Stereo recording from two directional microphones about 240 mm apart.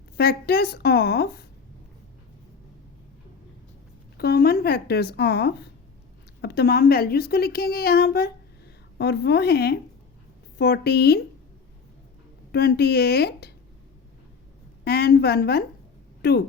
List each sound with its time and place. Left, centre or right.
0.2 s speech: left
4.2 s a woman's voice: left
12.5 s speech: left
14.8 s speech: left